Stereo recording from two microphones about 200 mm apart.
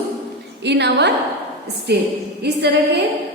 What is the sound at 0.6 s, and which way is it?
A woman's voice, 60° right (ahead or behind).